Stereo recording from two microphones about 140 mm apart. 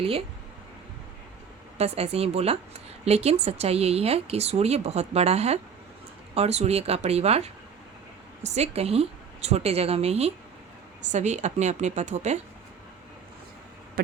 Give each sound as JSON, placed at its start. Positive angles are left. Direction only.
{"t": 0.0, "sound": "speech", "side_deg": -45}
{"t": 1.8, "sound": "a woman's voice", "side_deg": -50}